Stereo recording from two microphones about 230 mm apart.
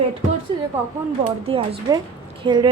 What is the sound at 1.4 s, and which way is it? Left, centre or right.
Speech, right.